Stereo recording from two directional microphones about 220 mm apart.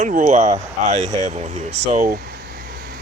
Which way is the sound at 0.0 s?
35° right (ahead or behind).